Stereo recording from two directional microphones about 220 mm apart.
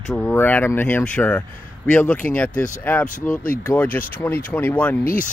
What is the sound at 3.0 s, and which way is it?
Speech, 35° left (ahead or behind).